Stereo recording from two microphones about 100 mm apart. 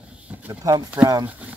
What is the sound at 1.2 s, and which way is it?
Speech, 15° right (ahead or behind).